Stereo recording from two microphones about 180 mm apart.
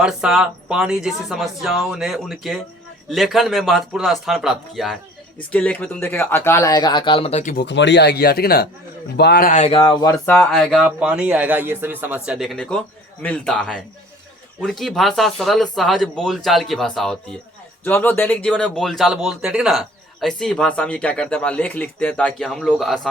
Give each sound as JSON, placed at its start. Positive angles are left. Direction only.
{"t": 0.0, "sound": "speech", "side_deg": -5}
{"t": 7.5, "sound": "speech", "side_deg": 75}
{"t": 9.5, "sound": "a man's voice", "side_deg": 35}
{"t": 10.2, "sound": "speech", "side_deg": 10}
{"t": 17.8, "sound": "speech", "side_deg": 10}